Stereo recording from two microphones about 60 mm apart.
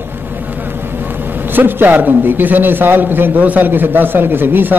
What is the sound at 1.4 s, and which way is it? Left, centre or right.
A man's voice, right.